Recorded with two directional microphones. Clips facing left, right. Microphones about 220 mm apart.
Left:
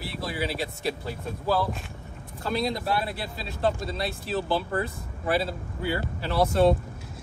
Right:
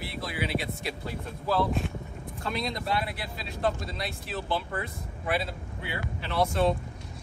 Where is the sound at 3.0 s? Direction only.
30° left (ahead or behind).